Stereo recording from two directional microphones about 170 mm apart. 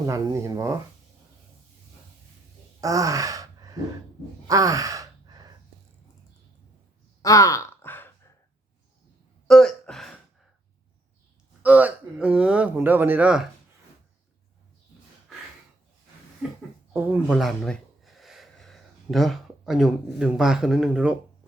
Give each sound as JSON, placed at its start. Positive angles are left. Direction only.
{"t": 0.0, "sound": "speech", "side_deg": -20}
{"t": 2.8, "sound": "sigh", "side_deg": -20}
{"t": 7.2, "sound": "sigh", "side_deg": 20}
{"t": 9.5, "sound": "speech", "side_deg": 0}
{"t": 11.6, "sound": "speech", "side_deg": -10}
{"t": 16.9, "sound": "speech", "side_deg": -10}